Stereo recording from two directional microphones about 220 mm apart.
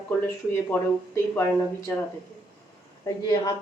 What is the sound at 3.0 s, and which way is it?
Speech, 20° left (ahead or behind).